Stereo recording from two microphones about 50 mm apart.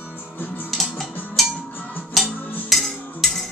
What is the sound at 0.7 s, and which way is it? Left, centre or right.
Music, centre.